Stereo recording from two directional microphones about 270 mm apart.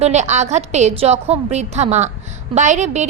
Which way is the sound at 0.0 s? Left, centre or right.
Right.